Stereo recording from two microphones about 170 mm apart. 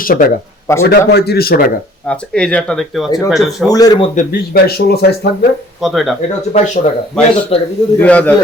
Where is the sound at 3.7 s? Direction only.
20° left (ahead or behind).